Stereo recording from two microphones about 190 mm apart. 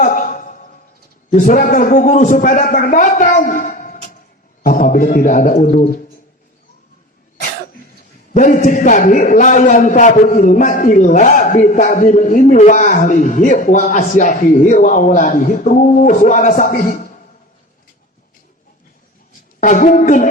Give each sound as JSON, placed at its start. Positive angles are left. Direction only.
{"t": 0.0, "sound": "a sound", "side_deg": 45}
{"t": 1.3, "sound": "a man's voice", "side_deg": 45}
{"t": 8.3, "sound": "a man's voice", "side_deg": 45}
{"t": 19.5, "sound": "a man's voice", "side_deg": 40}